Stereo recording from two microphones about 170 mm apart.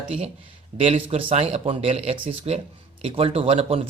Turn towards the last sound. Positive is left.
turn(degrees=-35)  # may be behind; listen again after turning